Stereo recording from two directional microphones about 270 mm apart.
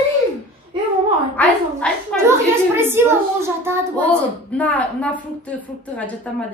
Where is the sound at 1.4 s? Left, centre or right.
Centre.